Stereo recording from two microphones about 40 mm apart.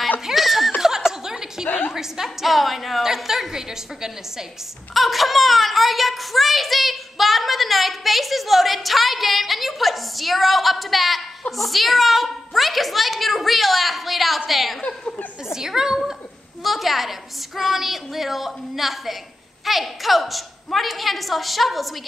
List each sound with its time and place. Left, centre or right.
0.3 s snicker: centre
0.7 s chuckle: centre
1.7 s a sound: left
2.0 s a woman's voice: centre
4.9 s speech: centre
14.8 s speech: left
15.5 s a woman's voice: centre
16.6 s speech: centre